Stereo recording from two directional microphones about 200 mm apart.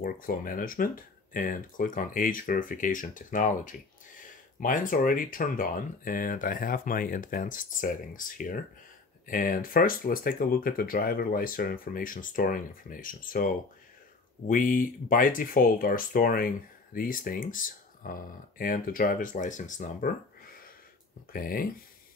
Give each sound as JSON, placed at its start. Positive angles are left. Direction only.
{"t": 0.0, "sound": "speech", "side_deg": 45}
{"t": 14.5, "sound": "speech", "side_deg": 45}
{"t": 21.3, "sound": "speech", "side_deg": 45}